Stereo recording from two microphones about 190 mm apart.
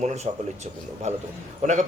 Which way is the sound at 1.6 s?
40° right (ahead or behind).